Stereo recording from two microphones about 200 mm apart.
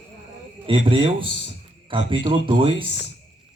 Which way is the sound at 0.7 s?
25° right (ahead or behind).